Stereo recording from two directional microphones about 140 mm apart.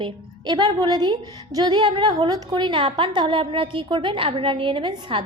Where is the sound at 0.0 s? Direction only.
30° right (ahead or behind).